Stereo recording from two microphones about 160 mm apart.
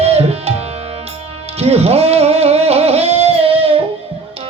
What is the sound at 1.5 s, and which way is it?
Music, 40° right (ahead or behind).